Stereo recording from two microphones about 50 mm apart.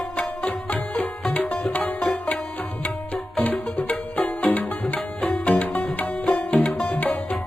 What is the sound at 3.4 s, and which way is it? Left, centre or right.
Music, left.